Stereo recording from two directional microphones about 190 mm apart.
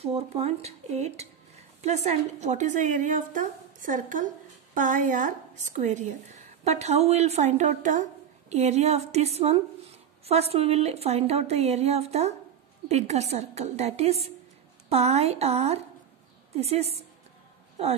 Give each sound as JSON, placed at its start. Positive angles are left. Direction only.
{"t": 0.0, "sound": "a woman's voice", "side_deg": -30}